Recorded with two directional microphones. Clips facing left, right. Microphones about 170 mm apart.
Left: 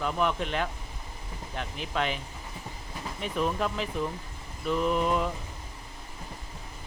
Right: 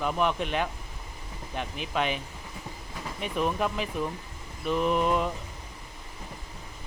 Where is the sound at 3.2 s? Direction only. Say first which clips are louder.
Right 1 dB; 15° right (ahead or behind).